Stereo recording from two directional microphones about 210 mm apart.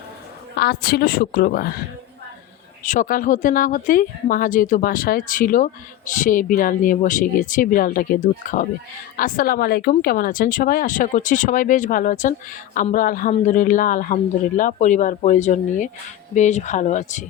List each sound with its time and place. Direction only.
0.5 s a woman's voice: 50° left (ahead or behind)
2.8 s speech: 35° left (ahead or behind)